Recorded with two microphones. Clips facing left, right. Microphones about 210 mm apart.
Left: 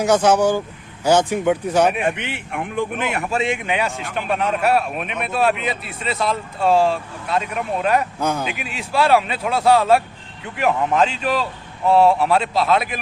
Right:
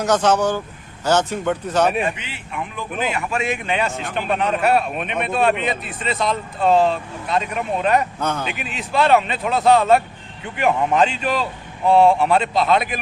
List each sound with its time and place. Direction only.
0.0 s speech: 10° left (ahead or behind)
2.0 s speech: 65° left (ahead or behind)
3.2 s speech: 30° left (ahead or behind)
3.6 s speech: 15° left (ahead or behind)